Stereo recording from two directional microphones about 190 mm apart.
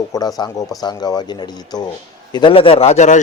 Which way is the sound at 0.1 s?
20° left (ahead or behind).